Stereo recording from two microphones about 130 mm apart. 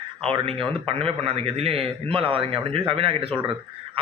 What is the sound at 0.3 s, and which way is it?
A man's voice, 45° right (ahead or behind).